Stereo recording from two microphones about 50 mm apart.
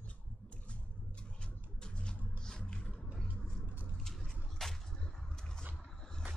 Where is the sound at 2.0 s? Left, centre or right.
Centre.